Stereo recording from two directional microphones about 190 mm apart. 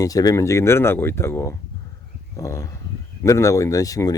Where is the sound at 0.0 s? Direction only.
20° left (ahead or behind).